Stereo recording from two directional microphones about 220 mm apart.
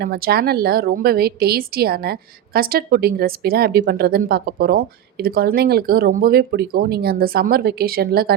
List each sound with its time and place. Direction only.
0.0 s a woman's voice: 45° right (ahead or behind)